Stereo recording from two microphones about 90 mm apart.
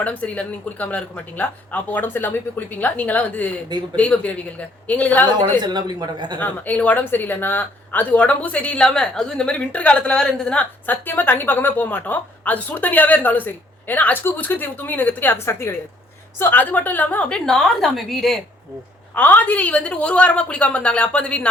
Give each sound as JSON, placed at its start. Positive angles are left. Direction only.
{"t": 0.0, "sound": "speech", "side_deg": 15}
{"t": 5.6, "sound": "speech", "side_deg": -55}
{"t": 6.4, "sound": "speech", "side_deg": 15}
{"t": 19.1, "sound": "speech", "side_deg": 20}